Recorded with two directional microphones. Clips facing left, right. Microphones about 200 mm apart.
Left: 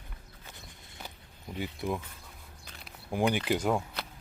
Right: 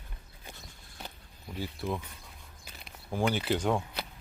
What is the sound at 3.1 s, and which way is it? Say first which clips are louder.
Speech: left 1 dB; 15° left (ahead or behind).